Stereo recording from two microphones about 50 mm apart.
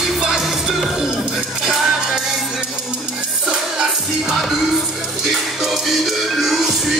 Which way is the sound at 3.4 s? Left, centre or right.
Centre.